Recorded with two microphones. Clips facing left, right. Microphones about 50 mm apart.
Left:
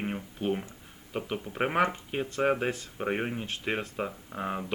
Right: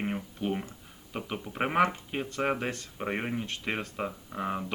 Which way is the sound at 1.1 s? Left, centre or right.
Centre.